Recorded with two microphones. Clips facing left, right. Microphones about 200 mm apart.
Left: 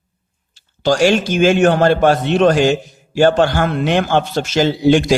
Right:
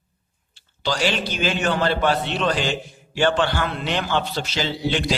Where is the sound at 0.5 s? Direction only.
45° left (ahead or behind).